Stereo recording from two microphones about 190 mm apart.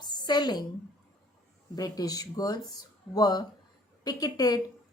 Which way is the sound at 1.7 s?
20° left (ahead or behind).